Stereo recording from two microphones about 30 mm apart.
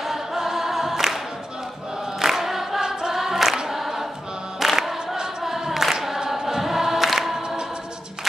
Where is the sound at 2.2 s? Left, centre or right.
Centre.